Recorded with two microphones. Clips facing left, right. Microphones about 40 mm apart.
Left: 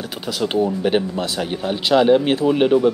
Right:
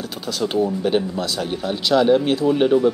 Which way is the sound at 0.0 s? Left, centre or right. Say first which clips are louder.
Left 1 dB; centre.